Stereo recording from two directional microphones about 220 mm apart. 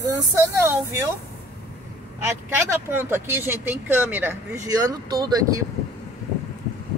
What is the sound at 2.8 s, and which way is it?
Speech, 10° right (ahead or behind).